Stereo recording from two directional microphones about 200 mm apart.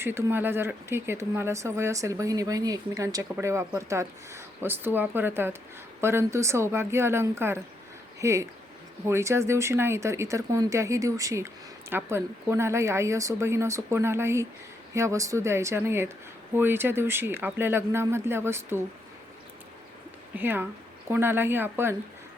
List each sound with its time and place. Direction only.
0.0 s speech: 10° right (ahead or behind)
20.3 s speech: 10° right (ahead or behind)